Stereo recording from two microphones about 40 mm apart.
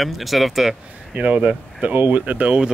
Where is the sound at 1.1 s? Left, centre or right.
Right.